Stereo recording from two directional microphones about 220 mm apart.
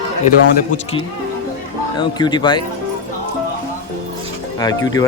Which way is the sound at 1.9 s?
20° left (ahead or behind).